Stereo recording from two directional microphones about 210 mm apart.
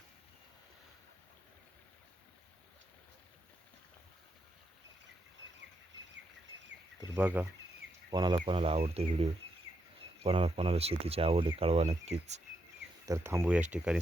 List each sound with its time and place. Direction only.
7.1 s speech: 10° right (ahead or behind)
8.1 s speech: 20° right (ahead or behind)
13.1 s speech: 15° right (ahead or behind)